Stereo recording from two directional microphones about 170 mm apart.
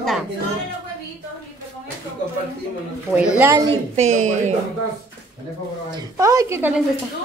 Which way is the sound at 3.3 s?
15° right (ahead or behind).